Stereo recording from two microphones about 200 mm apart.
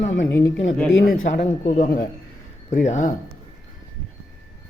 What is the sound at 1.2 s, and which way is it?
Speech, 35° left (ahead or behind).